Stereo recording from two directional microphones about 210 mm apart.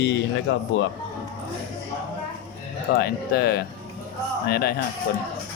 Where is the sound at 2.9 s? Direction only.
50° left (ahead or behind).